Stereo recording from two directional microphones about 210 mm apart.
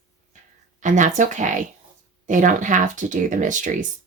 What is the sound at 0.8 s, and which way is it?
Speech, 35° right (ahead or behind).